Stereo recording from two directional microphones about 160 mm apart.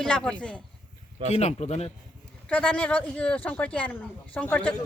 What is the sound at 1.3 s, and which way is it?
Speech, 45° left (ahead or behind).